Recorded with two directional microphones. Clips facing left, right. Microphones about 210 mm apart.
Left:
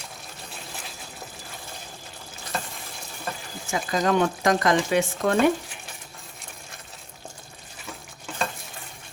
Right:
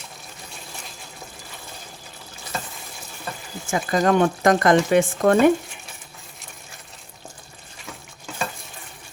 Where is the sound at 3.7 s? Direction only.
50° right (ahead or behind).